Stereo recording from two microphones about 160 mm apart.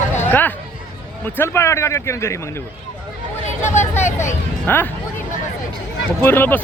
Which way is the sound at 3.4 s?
45° left (ahead or behind).